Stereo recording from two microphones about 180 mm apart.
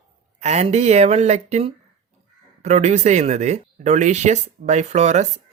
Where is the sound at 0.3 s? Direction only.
40° right (ahead or behind).